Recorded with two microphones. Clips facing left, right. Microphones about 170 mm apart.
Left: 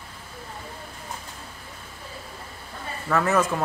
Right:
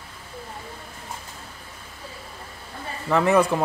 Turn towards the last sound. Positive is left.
turn(degrees=-15)  # may be behind; listen again after turning